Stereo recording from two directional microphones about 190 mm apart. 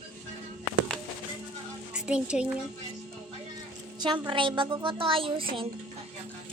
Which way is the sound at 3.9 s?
25° right (ahead or behind).